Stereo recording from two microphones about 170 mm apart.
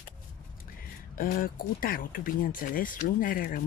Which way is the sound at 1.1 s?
55° left (ahead or behind).